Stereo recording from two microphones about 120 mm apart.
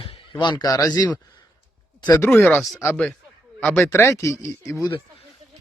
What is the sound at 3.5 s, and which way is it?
A man's voice, 15° left (ahead or behind).